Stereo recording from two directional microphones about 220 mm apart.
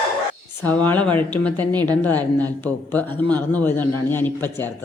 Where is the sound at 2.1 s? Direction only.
15° right (ahead or behind).